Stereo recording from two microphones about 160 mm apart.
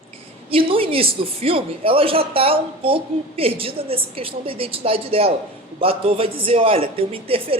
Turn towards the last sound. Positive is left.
turn(degrees=-35)  # may be behind; listen again after turning